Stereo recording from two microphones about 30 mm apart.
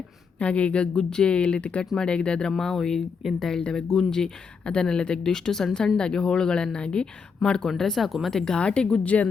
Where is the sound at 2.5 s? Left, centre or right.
Centre.